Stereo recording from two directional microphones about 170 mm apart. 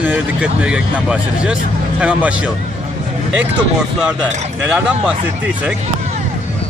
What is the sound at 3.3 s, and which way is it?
Speech, 5° right (ahead or behind).